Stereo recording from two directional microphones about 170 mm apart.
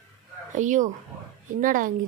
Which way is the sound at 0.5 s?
45° right (ahead or behind).